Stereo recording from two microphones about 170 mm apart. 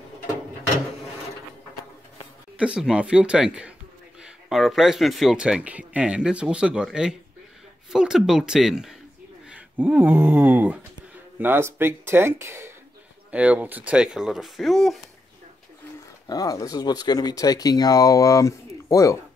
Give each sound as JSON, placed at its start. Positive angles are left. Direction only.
{"t": 2.5, "sound": "speech", "side_deg": -5}
{"t": 16.3, "sound": "speech", "side_deg": 20}